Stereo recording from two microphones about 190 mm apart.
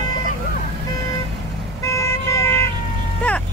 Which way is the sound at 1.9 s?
15° left (ahead or behind).